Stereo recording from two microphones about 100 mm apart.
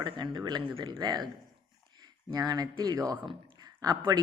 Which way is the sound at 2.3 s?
40° right (ahead or behind).